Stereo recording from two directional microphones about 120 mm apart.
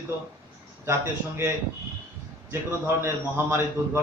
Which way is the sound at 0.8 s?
20° right (ahead or behind).